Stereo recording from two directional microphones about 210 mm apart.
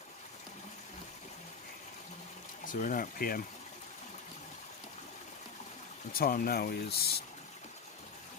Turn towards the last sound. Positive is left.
turn(degrees=50)  # may be behind; listen again after turning